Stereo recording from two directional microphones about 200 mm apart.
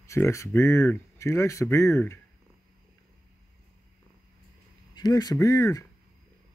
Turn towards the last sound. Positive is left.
turn(degrees=15)  # may be behind; listen again after turning